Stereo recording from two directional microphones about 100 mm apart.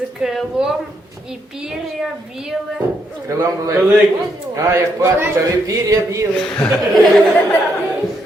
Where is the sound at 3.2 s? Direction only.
30° right (ahead or behind).